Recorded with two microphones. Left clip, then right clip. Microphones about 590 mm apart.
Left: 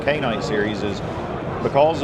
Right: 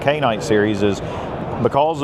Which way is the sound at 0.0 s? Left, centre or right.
Right.